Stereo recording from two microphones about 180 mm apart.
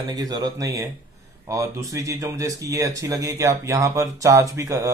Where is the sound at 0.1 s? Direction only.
20° right (ahead or behind).